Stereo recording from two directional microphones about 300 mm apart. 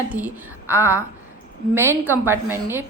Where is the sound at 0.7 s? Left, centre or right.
Centre.